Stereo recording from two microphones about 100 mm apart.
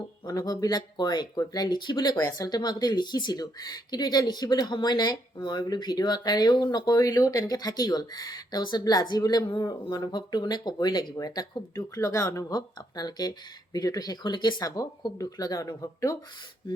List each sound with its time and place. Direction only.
0.3 s speech: 40° left (ahead or behind)